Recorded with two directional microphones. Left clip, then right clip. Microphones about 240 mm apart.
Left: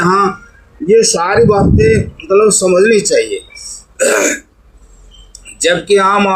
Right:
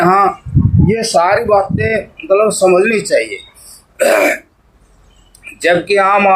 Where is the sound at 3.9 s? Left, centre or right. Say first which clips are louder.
Right 1 dB; right.